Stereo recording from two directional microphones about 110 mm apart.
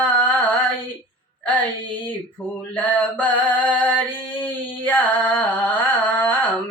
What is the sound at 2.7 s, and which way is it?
Mantra, 15° left (ahead or behind).